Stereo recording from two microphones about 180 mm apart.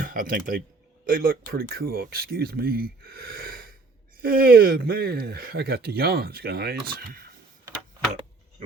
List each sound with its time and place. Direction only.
0.0 s speech: 50° right (ahead or behind)